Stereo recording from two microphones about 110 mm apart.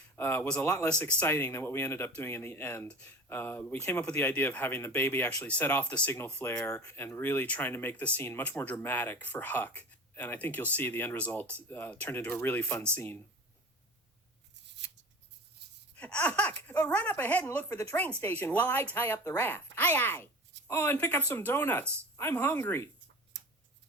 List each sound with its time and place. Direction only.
0.2 s speech: 20° left (ahead or behind)
0.9 s speech: 10° left (ahead or behind)
16.0 s speech: 10° left (ahead or behind)